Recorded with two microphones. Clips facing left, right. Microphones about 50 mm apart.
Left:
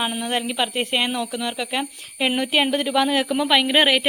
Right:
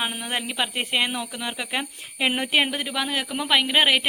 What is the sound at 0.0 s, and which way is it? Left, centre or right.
Speech, centre.